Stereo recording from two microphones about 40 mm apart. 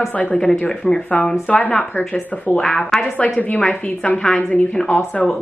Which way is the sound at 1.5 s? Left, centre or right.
Left.